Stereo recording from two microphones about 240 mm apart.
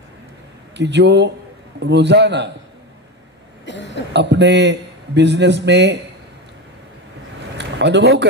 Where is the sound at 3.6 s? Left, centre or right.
Left.